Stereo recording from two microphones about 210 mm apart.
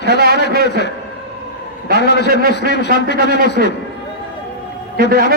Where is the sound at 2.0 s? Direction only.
55° left (ahead or behind).